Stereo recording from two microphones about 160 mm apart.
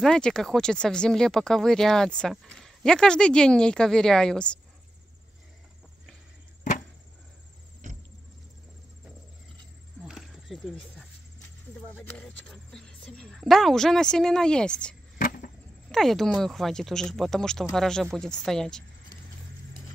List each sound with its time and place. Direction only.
0.0 s speech: 5° left (ahead or behind)
7.8 s vehicle: 50° right (ahead or behind)
10.0 s insect: centre (ahead or behind)
11.9 s speech: 10° left (ahead or behind)
15.1 s vehicle: 60° left (ahead or behind)
15.9 s speech: centre (ahead or behind)